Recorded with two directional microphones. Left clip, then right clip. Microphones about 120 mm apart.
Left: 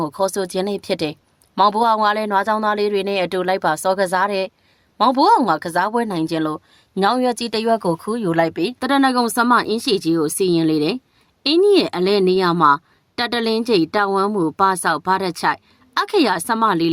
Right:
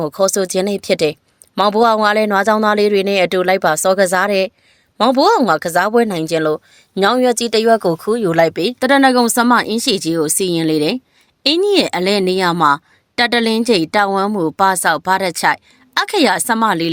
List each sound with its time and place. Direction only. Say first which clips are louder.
0.0 s a woman's voice: right 5 dB; 25° right (ahead or behind); by 8.7 s 40° right (ahead or behind)
8.8 s a woman's voice: right 6 dB; 20° right (ahead or behind)